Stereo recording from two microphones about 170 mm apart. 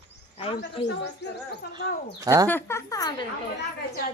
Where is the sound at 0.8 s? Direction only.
90° left.